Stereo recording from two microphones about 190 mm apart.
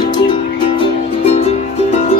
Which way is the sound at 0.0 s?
25° left (ahead or behind).